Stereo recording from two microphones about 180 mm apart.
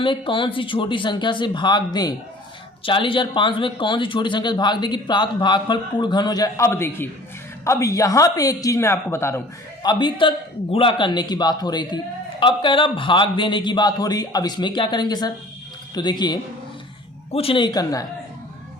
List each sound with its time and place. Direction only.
0.0 s a man's voice: 30° left (ahead or behind)